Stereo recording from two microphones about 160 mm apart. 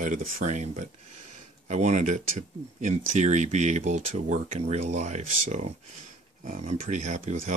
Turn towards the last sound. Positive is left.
turn(degrees=-50)  # may be behind; listen again after turning